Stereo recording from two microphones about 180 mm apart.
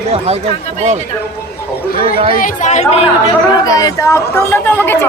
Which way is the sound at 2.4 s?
40° left (ahead or behind).